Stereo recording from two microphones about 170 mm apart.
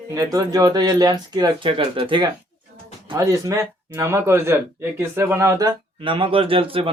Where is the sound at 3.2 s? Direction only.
20° right (ahead or behind).